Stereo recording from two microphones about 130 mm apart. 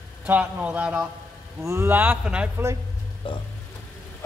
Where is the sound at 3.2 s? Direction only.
40° left (ahead or behind).